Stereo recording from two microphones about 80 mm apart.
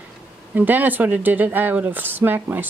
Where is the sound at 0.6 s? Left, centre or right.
Right.